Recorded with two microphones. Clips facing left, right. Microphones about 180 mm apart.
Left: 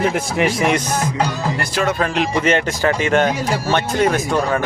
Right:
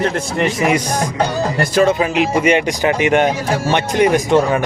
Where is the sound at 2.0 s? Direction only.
5° right (ahead or behind).